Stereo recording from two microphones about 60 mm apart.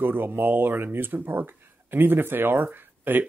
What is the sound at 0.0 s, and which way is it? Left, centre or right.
Speech, right.